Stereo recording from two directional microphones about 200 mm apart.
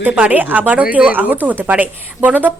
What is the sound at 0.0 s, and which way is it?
A woman's voice, 5° right (ahead or behind).